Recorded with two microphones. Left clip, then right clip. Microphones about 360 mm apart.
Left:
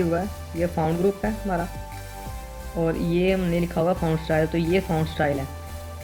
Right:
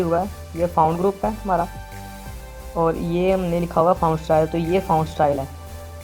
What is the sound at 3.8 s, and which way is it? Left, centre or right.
Speech, right.